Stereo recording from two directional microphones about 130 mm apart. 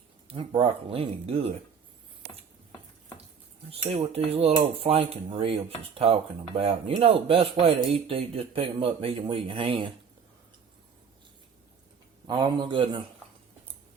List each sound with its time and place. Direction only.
0.3 s speech: 40° right (ahead or behind)
3.7 s speech: 50° right (ahead or behind)
12.3 s a man's voice: 35° right (ahead or behind)